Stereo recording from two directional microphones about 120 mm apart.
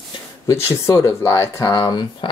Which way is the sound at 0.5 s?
25° left (ahead or behind).